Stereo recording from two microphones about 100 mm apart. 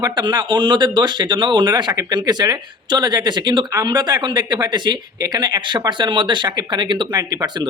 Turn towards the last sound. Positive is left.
turn(degrees=-40)  # may be behind; listen again after turning